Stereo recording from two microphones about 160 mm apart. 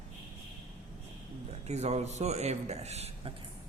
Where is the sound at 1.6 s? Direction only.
45° right (ahead or behind).